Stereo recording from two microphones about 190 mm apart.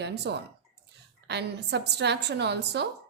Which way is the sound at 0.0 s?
60° right (ahead or behind).